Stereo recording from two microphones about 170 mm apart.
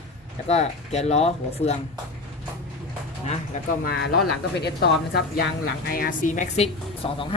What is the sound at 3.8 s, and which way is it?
Speech, 70° left (ahead or behind).